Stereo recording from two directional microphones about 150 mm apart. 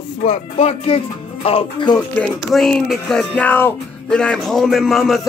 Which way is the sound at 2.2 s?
10° left (ahead or behind).